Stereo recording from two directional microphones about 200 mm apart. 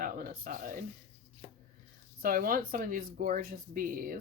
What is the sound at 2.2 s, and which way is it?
Speech, 45° right (ahead or behind).